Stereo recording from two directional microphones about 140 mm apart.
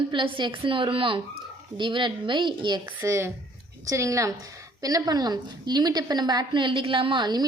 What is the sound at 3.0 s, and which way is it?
A woman's voice, 20° right (ahead or behind).